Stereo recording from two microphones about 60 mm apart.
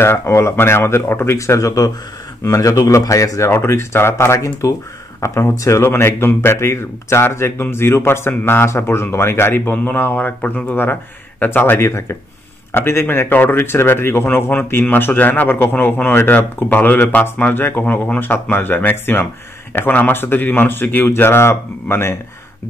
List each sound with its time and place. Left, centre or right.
0.0 s speech: left
5.8 s speech: left